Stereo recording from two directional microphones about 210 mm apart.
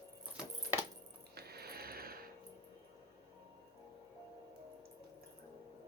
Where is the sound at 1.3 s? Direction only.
50° right (ahead or behind).